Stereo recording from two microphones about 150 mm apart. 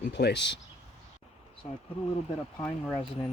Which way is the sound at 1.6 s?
40° left (ahead or behind).